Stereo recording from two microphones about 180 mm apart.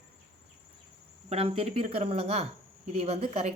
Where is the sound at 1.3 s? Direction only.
35° right (ahead or behind).